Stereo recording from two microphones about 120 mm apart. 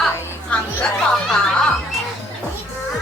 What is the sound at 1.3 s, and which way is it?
Music, 5° left (ahead or behind).